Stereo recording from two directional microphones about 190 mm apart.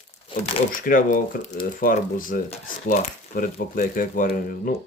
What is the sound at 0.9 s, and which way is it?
Speech, 45° left (ahead or behind).